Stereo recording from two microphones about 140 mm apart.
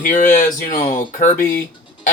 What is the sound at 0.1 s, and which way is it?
Speech, 65° left (ahead or behind).